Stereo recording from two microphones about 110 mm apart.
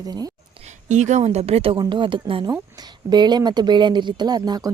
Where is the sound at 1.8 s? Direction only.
45° right (ahead or behind).